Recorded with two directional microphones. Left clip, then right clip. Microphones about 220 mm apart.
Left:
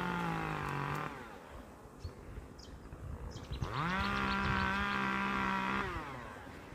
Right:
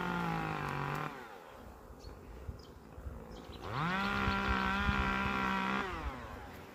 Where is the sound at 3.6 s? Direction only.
50° right (ahead or behind).